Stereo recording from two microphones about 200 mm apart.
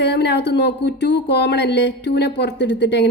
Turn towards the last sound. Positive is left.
turn(degrees=60)  # may be behind; listen again after turning